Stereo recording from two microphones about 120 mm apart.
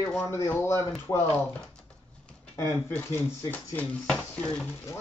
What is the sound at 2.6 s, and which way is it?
A man's voice, 20° left (ahead or behind).